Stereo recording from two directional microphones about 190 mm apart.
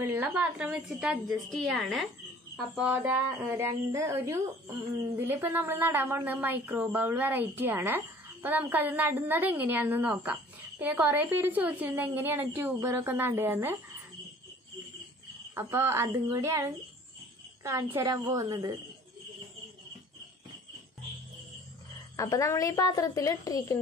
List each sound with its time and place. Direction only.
0.0 s a woman's voice: 10° right (ahead or behind)
15.5 s a woman's voice: 15° right (ahead or behind)
22.1 s a woman's voice: 15° left (ahead or behind)